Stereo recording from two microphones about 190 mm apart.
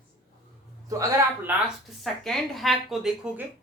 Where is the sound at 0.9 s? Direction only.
15° right (ahead or behind).